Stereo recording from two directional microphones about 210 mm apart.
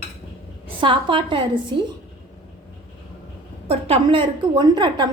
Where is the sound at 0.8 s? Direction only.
25° right (ahead or behind).